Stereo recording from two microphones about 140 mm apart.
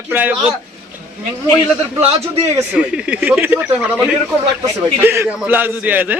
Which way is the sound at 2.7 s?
5° right (ahead or behind).